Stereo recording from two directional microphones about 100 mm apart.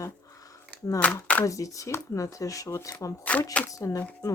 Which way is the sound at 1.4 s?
35° left (ahead or behind).